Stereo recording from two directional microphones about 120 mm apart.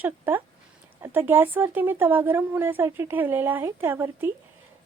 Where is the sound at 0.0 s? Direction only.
15° right (ahead or behind).